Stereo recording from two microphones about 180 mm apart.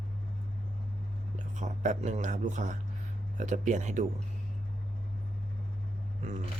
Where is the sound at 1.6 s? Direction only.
40° right (ahead or behind).